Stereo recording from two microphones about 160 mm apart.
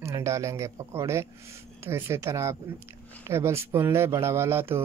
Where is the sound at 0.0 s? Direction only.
20° right (ahead or behind).